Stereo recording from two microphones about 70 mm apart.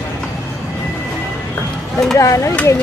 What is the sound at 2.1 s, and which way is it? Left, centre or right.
Speech, left.